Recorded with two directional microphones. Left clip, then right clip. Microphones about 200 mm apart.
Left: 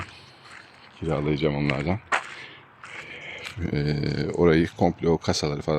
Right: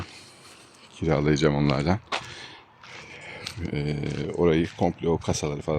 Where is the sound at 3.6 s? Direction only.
10° left (ahead or behind).